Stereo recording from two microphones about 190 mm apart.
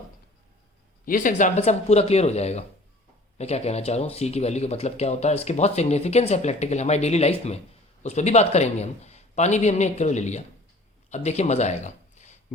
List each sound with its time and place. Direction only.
1.0 s speech: 45° left (ahead or behind)